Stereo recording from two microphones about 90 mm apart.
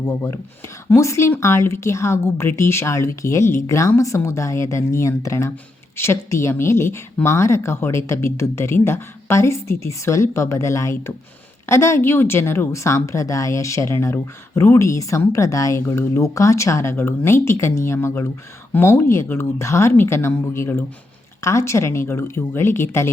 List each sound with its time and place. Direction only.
0.0 s speech: 40° left (ahead or behind)